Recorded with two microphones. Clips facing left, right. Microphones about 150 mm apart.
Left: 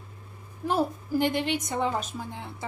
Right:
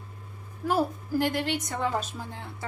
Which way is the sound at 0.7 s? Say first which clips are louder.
Even; 20° left (ahead or behind).